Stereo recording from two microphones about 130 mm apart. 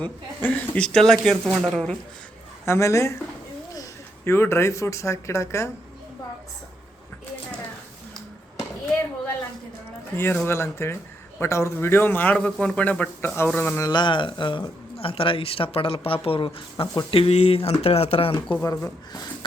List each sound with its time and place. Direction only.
0.0 s speech: 10° left (ahead or behind)
2.6 s speech: 20° left (ahead or behind)
10.3 s a man's voice: 20° left (ahead or behind)
13.8 s speech: 35° left (ahead or behind)
18.5 s speech: 20° left (ahead or behind)